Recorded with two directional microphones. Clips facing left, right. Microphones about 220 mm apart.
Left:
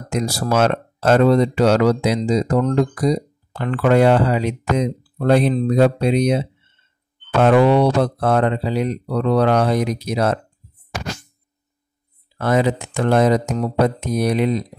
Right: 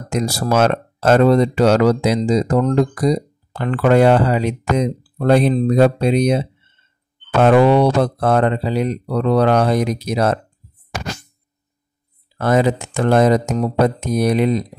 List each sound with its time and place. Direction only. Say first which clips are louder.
0.1 s speech: right 2 dB; 45° right (ahead or behind)
7.4 s speech: right 2 dB; 45° right (ahead or behind)
12.4 s speech: right 2 dB; 45° right (ahead or behind)